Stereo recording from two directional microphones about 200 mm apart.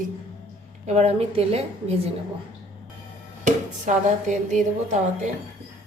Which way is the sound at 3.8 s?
40° right (ahead or behind).